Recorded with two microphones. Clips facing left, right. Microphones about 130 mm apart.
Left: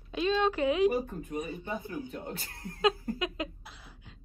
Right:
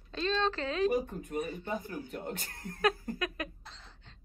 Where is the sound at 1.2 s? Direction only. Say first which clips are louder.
Even; 15° left (ahead or behind).